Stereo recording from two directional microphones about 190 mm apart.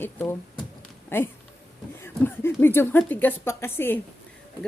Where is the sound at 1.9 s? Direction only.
10° left (ahead or behind).